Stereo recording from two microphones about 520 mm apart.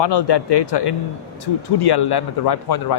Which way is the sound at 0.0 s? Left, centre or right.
Left.